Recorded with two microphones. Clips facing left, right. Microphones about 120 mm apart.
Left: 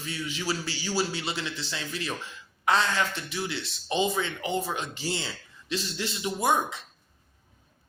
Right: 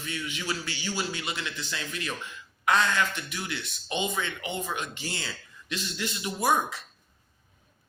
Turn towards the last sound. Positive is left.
turn(degrees=20)  # may be behind; listen again after turning